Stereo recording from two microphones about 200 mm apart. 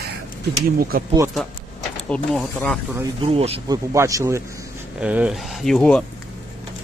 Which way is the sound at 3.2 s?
30° right (ahead or behind).